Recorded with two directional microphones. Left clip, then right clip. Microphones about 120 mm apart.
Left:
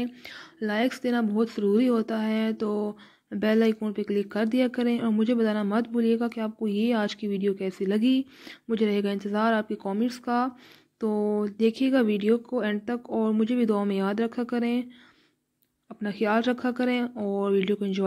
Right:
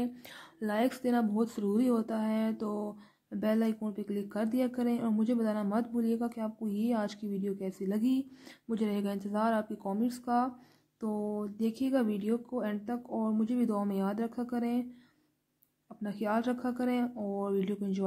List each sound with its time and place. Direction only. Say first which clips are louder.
0.2 s speech: left 7 dB; 5° left (ahead or behind); by 14.9 s 20° left (ahead or behind)
15.9 s speech: left 8 dB; 20° left (ahead or behind)